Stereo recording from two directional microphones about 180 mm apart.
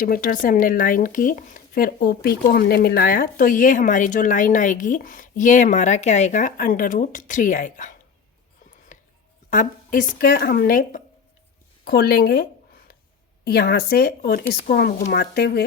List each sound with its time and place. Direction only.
0.0 s speech: 50° left (ahead or behind)
9.5 s speech: 50° left (ahead or behind)